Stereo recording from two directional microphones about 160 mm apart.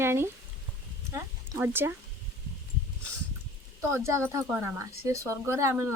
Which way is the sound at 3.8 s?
20° right (ahead or behind).